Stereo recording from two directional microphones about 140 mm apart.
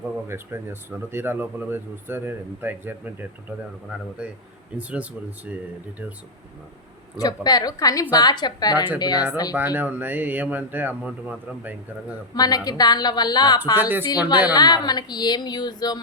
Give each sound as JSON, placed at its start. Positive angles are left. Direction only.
{"t": 0.0, "sound": "speech", "side_deg": -15}
{"t": 7.2, "sound": "speech", "side_deg": 30}
{"t": 9.6, "sound": "speech", "side_deg": -15}
{"t": 12.3, "sound": "speech", "side_deg": 25}
{"t": 13.7, "sound": "speech", "side_deg": -15}
{"t": 14.5, "sound": "speech", "side_deg": 30}